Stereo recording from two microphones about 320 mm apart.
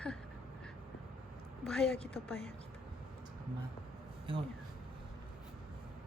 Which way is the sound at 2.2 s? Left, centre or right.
Centre.